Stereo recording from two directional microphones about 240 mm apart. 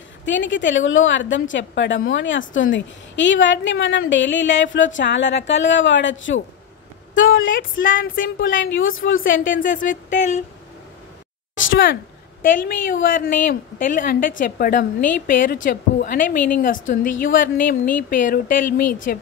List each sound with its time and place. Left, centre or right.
0.2 s a woman's voice: left
8.5 s a woman's voice: left
8.7 s a woman's voice: left
9.2 s a woman's voice: left
11.5 s a sound: left
12.4 s a woman's voice: left